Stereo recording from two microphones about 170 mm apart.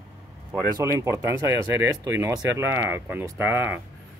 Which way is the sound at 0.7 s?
15° right (ahead or behind).